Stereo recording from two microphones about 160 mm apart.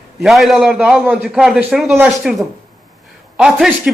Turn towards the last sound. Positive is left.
turn(degrees=-5)  # may be behind; listen again after turning